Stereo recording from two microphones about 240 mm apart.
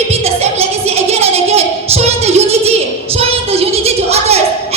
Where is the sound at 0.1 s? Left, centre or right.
Right.